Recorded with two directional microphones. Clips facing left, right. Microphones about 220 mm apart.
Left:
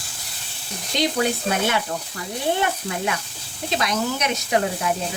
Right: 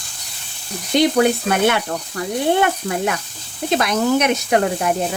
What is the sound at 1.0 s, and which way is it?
Speech, 60° right (ahead or behind).